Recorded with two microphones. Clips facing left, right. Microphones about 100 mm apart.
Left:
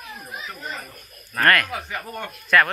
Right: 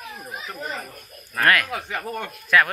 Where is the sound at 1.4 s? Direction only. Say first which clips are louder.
Left 1 dB; 10° right (ahead or behind).